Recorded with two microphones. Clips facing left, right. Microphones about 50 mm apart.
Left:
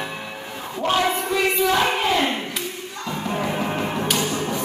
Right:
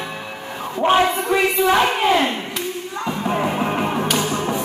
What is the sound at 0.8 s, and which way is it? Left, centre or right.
Speech, right.